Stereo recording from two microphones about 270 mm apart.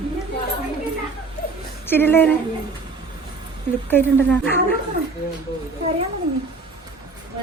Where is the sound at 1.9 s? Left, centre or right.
Centre.